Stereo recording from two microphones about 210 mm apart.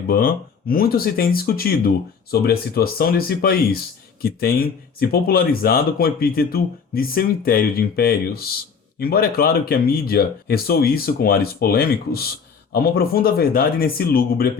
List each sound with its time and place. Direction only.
0.1 s speech: 45° left (ahead or behind)